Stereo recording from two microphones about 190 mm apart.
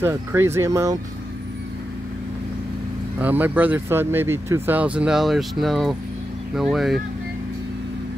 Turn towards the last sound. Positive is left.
turn(degrees=0)  # may be behind; listen again after turning